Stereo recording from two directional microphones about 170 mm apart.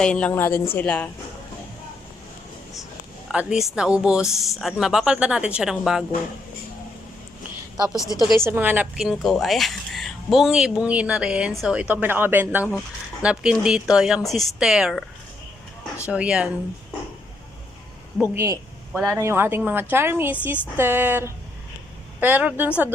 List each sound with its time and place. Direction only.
0.0 s a woman's voice: 5° left (ahead or behind)
3.2 s speech: centre (ahead or behind)
8.0 s a woman's voice: 20° left (ahead or behind)
8.4 s a man's voice: 10° right (ahead or behind)
16.0 s a man's voice: 5° right (ahead or behind)
18.2 s a man's voice: 15° right (ahead or behind)